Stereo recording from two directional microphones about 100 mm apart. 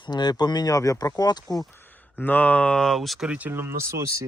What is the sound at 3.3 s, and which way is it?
Speech, 15° right (ahead or behind).